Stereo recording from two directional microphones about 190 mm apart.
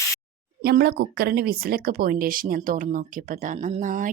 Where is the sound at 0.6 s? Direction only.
60° right (ahead or behind).